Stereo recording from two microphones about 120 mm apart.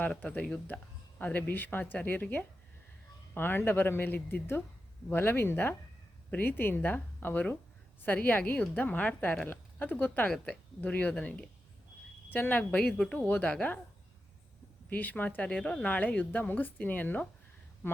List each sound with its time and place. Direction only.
0.0 s a woman's voice: 10° left (ahead or behind)
14.8 s a woman's voice: 15° left (ahead or behind)